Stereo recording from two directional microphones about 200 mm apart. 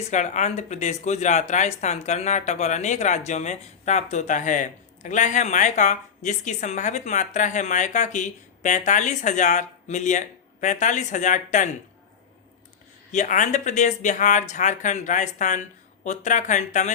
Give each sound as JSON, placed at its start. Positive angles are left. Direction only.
{"t": 0.1, "sound": "speech", "side_deg": 35}
{"t": 13.1, "sound": "speech", "side_deg": 40}